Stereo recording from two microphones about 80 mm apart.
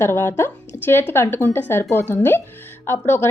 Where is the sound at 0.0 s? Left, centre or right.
Left.